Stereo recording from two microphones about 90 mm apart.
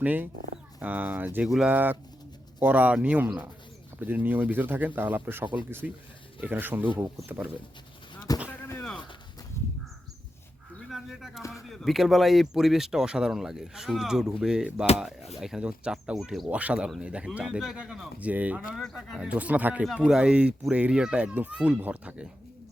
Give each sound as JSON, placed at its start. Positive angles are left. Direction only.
{"t": 0.0, "sound": "speech", "side_deg": -20}
{"t": 5.8, "sound": "speech", "side_deg": -15}
{"t": 8.3, "sound": "a sound", "side_deg": 45}
{"t": 9.6, "sound": "crow", "side_deg": 35}
{"t": 10.8, "sound": "a sound", "side_deg": 0}
{"t": 11.5, "sound": "speech", "side_deg": 0}
{"t": 18.2, "sound": "speech", "side_deg": -15}
{"t": 18.7, "sound": "speech", "side_deg": -5}
{"t": 19.2, "sound": "speech", "side_deg": -15}